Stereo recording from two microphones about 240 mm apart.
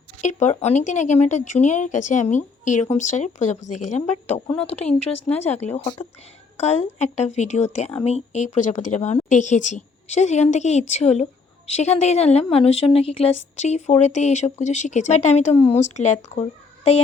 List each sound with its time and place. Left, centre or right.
0.2 s speech: left